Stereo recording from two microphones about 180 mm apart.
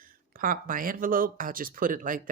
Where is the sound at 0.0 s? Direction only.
50° right (ahead or behind).